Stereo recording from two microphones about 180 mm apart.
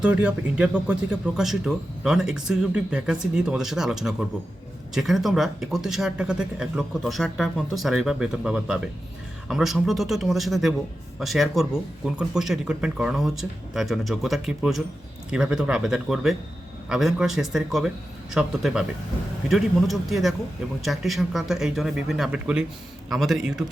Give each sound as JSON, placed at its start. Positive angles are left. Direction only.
{"t": 0.0, "sound": "speech", "side_deg": -5}